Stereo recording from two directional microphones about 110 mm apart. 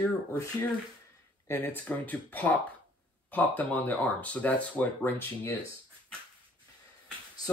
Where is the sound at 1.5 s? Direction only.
15° left (ahead or behind).